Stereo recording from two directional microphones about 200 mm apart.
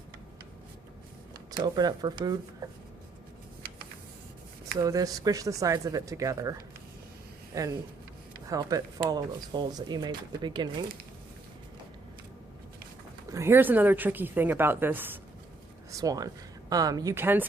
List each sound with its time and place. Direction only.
1.5 s speech: 20° right (ahead or behind)
4.8 s a woman's voice: 15° right (ahead or behind)
13.3 s a woman's voice: 10° right (ahead or behind)